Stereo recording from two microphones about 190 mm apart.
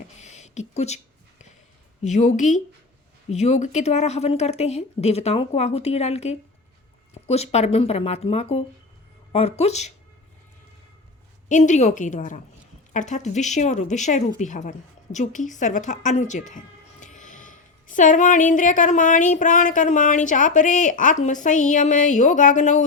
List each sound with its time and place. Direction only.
0.2 s a sound: 35° left (ahead or behind)
2.0 s a woman's voice: 40° left (ahead or behind)
11.4 s a woman's voice: 40° left (ahead or behind)